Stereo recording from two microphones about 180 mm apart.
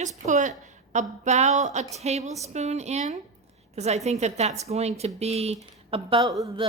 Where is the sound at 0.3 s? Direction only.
45° right (ahead or behind).